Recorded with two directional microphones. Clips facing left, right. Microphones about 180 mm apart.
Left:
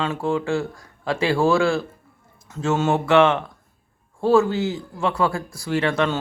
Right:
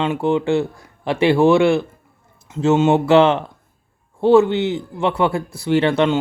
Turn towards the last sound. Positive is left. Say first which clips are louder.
# right 6 dB
turn(degrees=-20)  # may be behind; listen again after turning